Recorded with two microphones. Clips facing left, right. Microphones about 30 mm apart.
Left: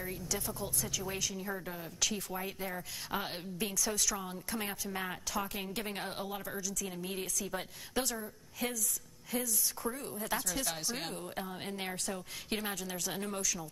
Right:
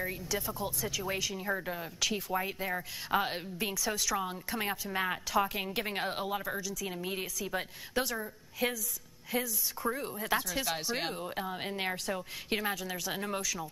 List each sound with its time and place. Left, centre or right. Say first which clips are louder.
0.0 s speech: right 4 dB; centre
7.9 s a woman's voice: right 3 dB; centre
8.2 s a woman's voice: right 5 dB; right